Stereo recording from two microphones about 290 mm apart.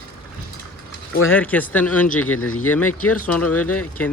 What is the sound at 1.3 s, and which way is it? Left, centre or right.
Speech, centre.